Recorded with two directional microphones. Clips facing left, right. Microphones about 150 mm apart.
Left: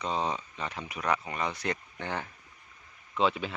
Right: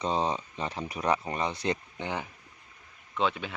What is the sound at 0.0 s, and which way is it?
Speech, 30° right (ahead or behind).